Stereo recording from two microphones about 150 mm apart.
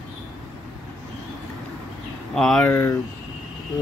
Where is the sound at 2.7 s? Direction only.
15° left (ahead or behind).